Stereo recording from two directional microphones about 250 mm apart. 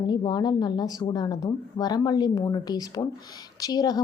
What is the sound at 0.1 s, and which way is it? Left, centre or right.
A woman's voice, centre.